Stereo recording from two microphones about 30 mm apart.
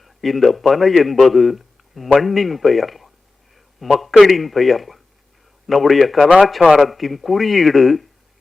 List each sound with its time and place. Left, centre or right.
0.0 s a man's voice: centre
3.5 s a sound: centre
4.2 s a man's voice: centre
6.2 s speech: right
6.7 s a man's voice: centre